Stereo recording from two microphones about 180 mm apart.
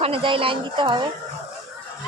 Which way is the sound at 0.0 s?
30° right (ahead or behind).